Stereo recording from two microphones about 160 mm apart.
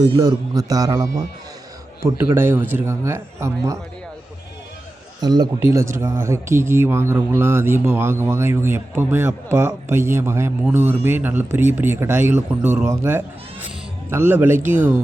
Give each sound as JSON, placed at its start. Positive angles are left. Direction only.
{"t": 0.1, "sound": "a man's voice", "side_deg": -25}
{"t": 5.2, "sound": "a man's voice", "side_deg": -25}
{"t": 14.8, "sound": "speech", "side_deg": -50}